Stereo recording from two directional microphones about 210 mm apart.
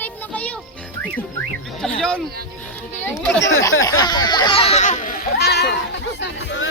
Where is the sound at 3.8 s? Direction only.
20° left (ahead or behind); by 5.7 s 50° left (ahead or behind).